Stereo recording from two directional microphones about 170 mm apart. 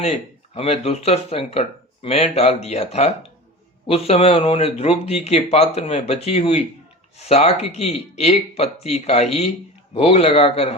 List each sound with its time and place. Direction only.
0.0 s speech: 35° left (ahead or behind)